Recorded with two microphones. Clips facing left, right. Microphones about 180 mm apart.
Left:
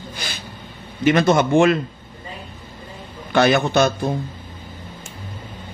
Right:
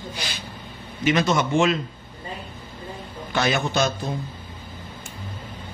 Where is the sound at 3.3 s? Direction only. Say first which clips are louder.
Left 7 dB; 60° left (ahead or behind).